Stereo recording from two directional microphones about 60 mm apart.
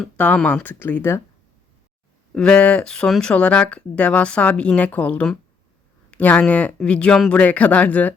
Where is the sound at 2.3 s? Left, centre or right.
Centre.